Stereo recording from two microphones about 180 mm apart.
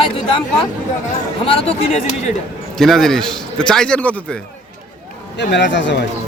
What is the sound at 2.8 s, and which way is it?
A man's voice, centre (ahead or behind).